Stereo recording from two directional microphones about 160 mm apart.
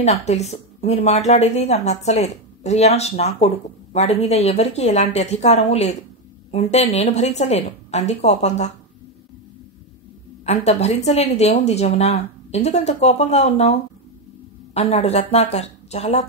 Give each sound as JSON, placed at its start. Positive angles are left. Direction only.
{"t": 0.0, "sound": "a woman's voice", "side_deg": 45}
{"t": 10.4, "sound": "a woman's voice", "side_deg": 45}